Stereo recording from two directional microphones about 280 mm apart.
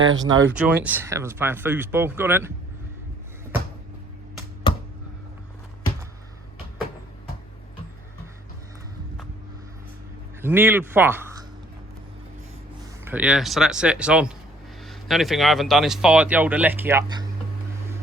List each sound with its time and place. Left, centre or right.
0.3 s speech: right
0.6 s speech: centre
10.4 s speech: centre
13.1 s speech: centre